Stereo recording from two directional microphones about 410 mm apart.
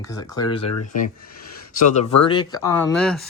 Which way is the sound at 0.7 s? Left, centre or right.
Left.